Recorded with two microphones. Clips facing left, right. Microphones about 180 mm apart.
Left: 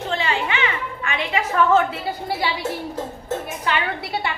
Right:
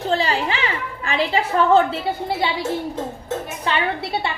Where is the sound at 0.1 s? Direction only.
35° right (ahead or behind).